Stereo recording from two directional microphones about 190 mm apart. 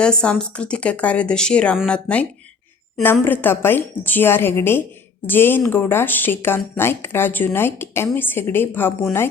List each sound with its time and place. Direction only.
0.0 s a woman's voice: 5° left (ahead or behind)